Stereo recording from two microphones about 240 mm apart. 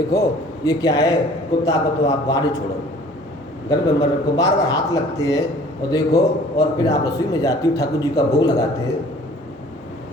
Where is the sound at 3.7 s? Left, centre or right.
Centre.